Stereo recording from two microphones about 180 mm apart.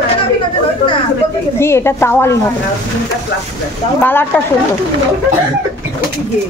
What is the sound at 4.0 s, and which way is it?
Speech, 10° left (ahead or behind).